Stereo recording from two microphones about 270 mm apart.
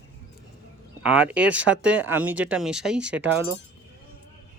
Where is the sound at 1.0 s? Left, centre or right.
Centre.